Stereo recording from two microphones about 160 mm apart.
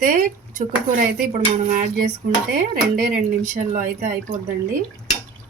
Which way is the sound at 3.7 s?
55° right (ahead or behind).